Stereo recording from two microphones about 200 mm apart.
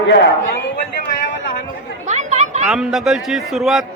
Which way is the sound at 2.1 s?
35° right (ahead or behind).